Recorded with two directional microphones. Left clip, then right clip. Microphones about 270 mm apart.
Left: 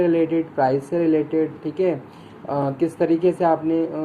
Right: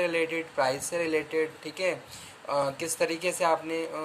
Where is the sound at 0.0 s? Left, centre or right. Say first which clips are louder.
Left 8 dB; right.